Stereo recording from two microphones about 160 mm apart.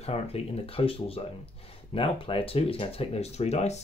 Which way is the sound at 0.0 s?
40° left (ahead or behind).